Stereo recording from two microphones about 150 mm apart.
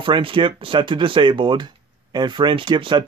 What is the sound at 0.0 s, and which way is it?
Speech, 35° right (ahead or behind).